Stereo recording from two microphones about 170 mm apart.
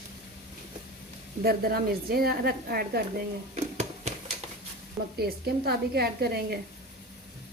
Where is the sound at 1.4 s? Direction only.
65° right (ahead or behind).